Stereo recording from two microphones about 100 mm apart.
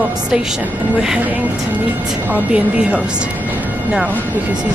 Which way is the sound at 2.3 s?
15° right (ahead or behind).